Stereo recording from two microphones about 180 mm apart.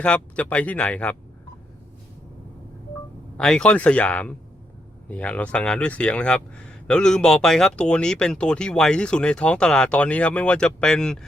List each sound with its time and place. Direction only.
0.0 s speech: 5° left (ahead or behind)
3.3 s speech: 5° left (ahead or behind)